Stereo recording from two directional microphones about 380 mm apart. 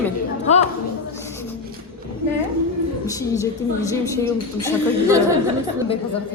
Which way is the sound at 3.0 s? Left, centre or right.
Centre.